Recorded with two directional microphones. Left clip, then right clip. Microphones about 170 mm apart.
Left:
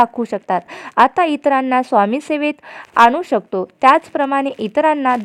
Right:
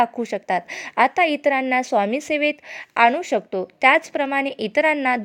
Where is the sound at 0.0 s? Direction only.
5° right (ahead or behind).